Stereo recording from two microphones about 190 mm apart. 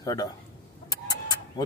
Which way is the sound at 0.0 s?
20° left (ahead or behind).